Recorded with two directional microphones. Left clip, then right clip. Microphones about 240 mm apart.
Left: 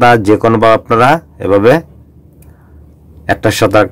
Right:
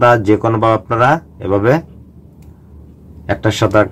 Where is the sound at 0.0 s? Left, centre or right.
Left.